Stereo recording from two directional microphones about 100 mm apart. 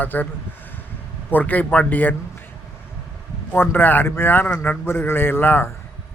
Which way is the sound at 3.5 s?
20° left (ahead or behind).